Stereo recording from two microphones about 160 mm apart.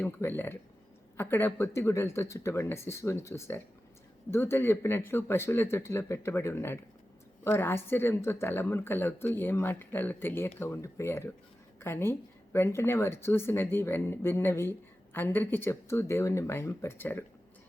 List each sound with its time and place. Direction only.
0.0 s speech: 15° left (ahead or behind)